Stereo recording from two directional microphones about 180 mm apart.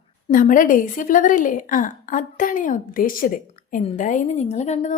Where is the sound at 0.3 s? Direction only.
50° left (ahead or behind).